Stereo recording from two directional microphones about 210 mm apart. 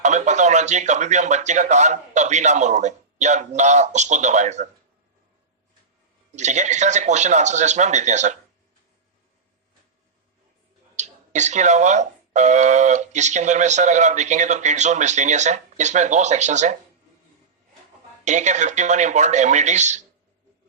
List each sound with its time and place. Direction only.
0.0 s speech: 35° right (ahead or behind)
6.3 s speech: 35° right (ahead or behind)
10.9 s speech: 35° right (ahead or behind)
18.3 s speech: 35° right (ahead or behind)